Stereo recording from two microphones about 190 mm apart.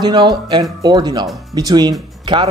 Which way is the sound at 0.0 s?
20° right (ahead or behind).